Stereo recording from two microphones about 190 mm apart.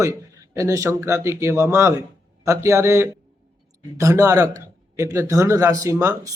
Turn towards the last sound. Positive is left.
turn(degrees=-15)  # may be behind; listen again after turning